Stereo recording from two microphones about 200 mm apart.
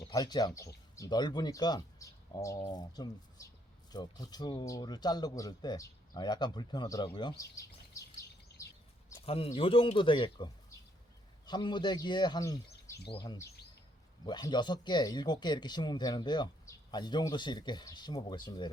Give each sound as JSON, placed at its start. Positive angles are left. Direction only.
{"t": 0.1, "sound": "speech", "side_deg": 20}
{"t": 9.2, "sound": "speech", "side_deg": 30}